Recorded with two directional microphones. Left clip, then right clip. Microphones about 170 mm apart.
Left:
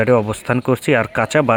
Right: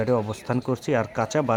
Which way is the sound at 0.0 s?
30° left (ahead or behind).